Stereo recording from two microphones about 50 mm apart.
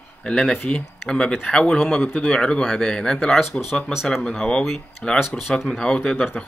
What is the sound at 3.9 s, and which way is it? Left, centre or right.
Speech, centre.